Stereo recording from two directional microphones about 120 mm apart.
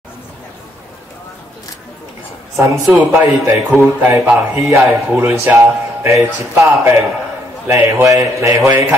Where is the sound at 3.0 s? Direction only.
15° right (ahead or behind).